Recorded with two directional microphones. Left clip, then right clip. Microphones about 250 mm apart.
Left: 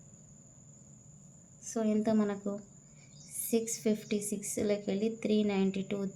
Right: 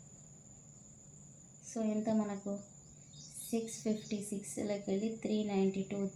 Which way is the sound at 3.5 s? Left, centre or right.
Left.